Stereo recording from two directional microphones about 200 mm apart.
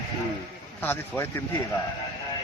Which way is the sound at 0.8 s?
10° left (ahead or behind).